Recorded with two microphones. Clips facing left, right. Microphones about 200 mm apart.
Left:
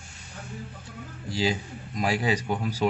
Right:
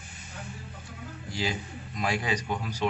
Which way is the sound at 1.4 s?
30° left (ahead or behind).